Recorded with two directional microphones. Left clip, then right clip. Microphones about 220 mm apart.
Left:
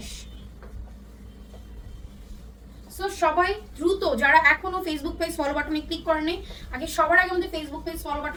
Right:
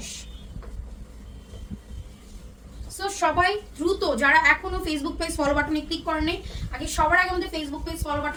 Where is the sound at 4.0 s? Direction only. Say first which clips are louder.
Left 1 dB; 20° right (ahead or behind).